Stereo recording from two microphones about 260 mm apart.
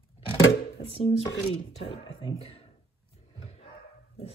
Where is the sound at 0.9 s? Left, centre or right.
Left.